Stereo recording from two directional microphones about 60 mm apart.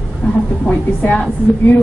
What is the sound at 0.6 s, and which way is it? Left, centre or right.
A woman's voice, left.